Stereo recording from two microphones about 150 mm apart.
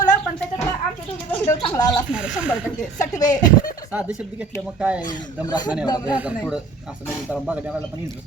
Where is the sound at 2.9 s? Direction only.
25° left (ahead or behind).